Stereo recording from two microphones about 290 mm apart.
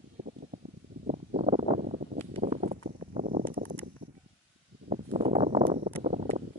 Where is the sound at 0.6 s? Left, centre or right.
Right.